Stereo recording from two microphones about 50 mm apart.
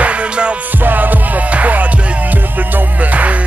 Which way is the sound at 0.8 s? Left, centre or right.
Right.